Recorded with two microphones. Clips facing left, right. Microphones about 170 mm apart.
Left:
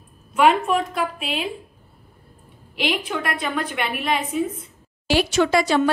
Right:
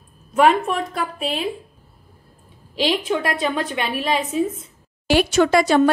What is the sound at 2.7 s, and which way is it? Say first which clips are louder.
Speech: right 3 dB; 30° right (ahead or behind).